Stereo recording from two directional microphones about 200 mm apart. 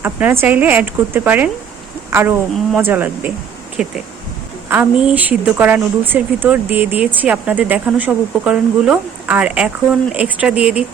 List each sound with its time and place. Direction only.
0.0 s a woman's voice: 10° right (ahead or behind)